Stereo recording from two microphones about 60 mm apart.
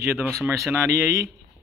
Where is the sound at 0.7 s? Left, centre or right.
Right.